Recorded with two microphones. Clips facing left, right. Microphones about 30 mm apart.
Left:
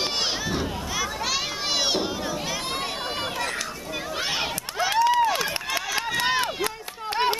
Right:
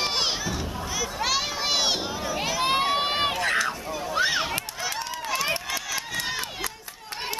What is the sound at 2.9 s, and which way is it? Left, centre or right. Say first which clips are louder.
Run: right 4 dB; right.